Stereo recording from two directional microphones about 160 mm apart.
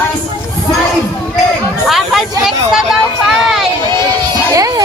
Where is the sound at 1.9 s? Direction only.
Centre (ahead or behind).